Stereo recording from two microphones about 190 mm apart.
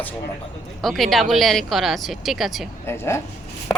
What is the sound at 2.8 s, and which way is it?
Speech, 15° left (ahead or behind).